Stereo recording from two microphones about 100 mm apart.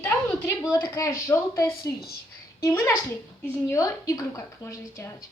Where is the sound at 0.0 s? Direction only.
20° left (ahead or behind).